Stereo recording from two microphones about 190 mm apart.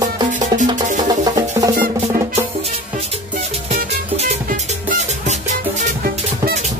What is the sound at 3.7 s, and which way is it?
Music, 35° right (ahead or behind).